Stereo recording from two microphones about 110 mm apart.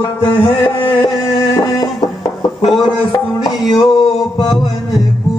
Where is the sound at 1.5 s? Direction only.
35° left (ahead or behind).